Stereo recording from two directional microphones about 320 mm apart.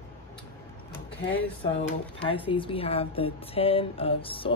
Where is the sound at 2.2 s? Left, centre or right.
Centre.